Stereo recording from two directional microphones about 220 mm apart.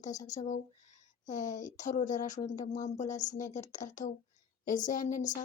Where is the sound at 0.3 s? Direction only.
35° left (ahead or behind).